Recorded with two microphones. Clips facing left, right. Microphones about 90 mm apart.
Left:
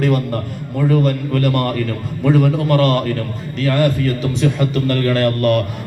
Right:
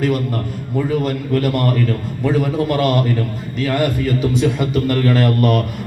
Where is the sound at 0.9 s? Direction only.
5° right (ahead or behind).